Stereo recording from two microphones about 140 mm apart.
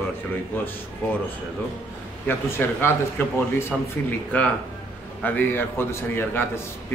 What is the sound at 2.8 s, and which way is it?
Speech, 15° left (ahead or behind).